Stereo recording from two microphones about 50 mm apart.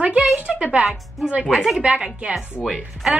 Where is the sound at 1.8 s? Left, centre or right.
Right.